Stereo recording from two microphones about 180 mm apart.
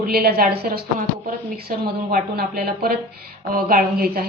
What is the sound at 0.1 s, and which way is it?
Speech, 55° right (ahead or behind).